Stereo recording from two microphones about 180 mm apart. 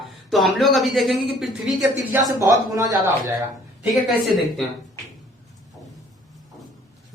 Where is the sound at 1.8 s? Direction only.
20° right (ahead or behind).